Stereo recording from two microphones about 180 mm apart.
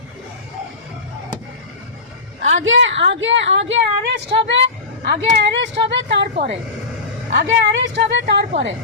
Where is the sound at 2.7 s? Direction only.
90° right.